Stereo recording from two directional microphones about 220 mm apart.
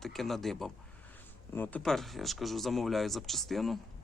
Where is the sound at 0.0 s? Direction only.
Centre (ahead or behind).